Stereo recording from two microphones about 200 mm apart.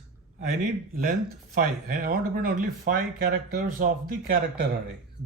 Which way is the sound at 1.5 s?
45° right (ahead or behind).